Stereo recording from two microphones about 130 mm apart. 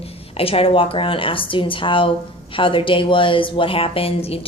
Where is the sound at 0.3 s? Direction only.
45° left (ahead or behind).